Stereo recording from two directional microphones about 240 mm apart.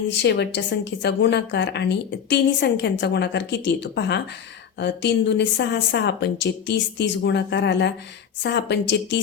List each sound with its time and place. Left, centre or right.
0.1 s a woman's voice: left